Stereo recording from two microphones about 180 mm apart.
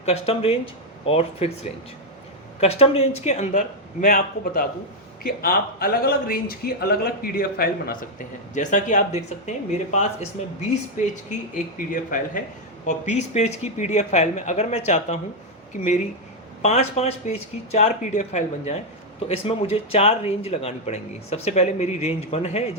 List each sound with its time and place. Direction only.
0.0 s speech: 35° left (ahead or behind)
2.6 s speech: 35° left (ahead or behind); by 7.9 s 55° left (ahead or behind)
8.5 s speech: 45° left (ahead or behind)